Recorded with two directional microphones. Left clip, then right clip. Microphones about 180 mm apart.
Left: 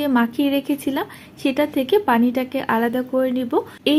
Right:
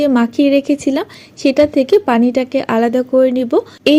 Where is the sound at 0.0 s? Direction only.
40° right (ahead or behind).